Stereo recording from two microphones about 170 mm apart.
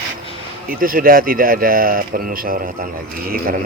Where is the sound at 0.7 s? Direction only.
55° right (ahead or behind).